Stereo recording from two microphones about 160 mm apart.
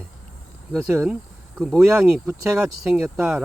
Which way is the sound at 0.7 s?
5° right (ahead or behind).